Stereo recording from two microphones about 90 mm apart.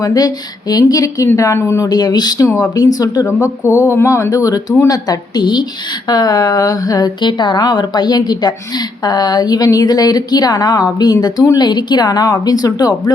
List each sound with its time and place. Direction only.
0.0 s speech: 45° left (ahead or behind); by 1.9 s 30° left (ahead or behind)
1.9 s speech: 50° left (ahead or behind)
3.7 s speech: 20° right (ahead or behind)
3.9 s speech: 30° left (ahead or behind)
7.2 s speech: 60° left (ahead or behind)